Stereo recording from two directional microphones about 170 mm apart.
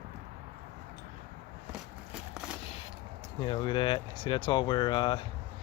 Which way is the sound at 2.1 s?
5° right (ahead or behind).